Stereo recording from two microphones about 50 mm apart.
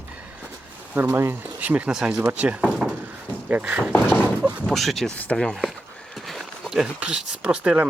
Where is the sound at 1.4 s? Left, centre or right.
Right.